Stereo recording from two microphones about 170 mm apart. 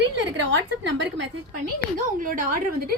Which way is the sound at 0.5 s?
90° right.